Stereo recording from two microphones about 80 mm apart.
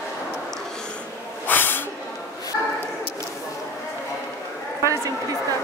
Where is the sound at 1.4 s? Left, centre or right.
Left.